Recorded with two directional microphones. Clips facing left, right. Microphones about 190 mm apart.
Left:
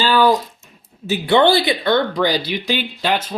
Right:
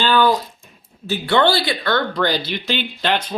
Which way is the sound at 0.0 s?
10° left (ahead or behind).